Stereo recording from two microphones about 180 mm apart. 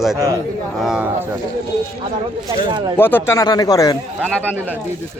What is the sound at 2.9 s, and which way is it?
Speech, 10° left (ahead or behind).